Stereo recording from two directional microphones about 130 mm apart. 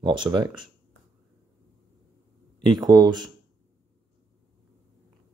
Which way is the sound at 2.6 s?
35° right (ahead or behind).